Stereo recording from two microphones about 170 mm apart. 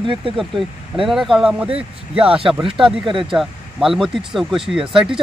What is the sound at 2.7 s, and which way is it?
Speech, 5° right (ahead or behind).